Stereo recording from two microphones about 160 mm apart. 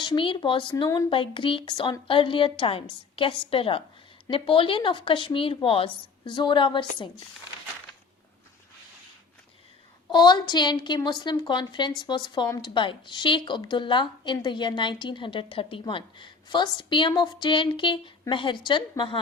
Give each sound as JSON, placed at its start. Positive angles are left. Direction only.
{"t": 0.0, "sound": "speech", "side_deg": 30}
{"t": 10.1, "sound": "a woman's voice", "side_deg": 25}